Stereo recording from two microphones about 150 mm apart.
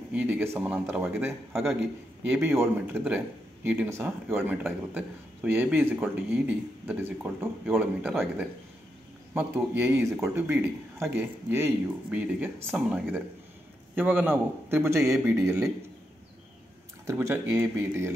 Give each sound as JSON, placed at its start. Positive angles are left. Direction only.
{"t": 0.1, "sound": "speech", "side_deg": -10}
{"t": 2.4, "sound": "speech", "side_deg": -15}
{"t": 9.3, "sound": "speech", "side_deg": -15}
{"t": 17.0, "sound": "speech", "side_deg": -20}